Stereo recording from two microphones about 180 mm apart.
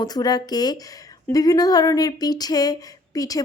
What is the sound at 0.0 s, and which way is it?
A woman's voice, 20° left (ahead or behind).